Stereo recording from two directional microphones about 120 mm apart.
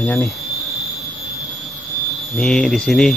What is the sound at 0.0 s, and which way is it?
Speech, 15° left (ahead or behind).